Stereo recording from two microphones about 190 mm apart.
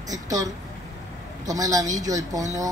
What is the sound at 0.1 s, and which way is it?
Speech, 20° right (ahead or behind).